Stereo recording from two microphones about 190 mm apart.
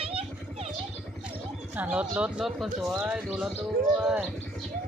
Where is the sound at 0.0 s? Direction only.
30° right (ahead or behind).